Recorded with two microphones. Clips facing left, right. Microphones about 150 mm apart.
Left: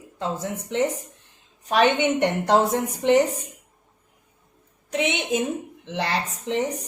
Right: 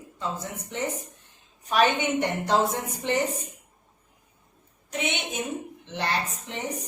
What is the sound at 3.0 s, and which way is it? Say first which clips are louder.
Speech: left 9 dB; 60° left (ahead or behind).